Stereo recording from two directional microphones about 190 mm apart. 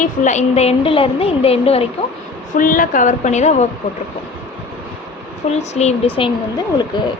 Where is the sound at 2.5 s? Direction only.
45° left (ahead or behind).